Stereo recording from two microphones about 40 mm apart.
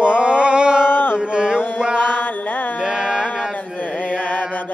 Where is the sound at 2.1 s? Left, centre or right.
Left.